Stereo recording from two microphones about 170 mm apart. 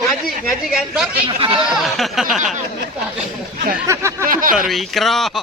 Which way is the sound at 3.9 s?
15° right (ahead or behind).